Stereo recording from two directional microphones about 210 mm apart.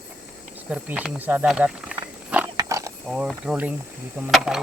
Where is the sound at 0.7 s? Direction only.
5° right (ahead or behind).